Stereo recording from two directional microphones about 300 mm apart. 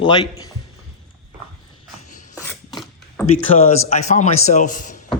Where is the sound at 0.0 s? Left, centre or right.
Centre.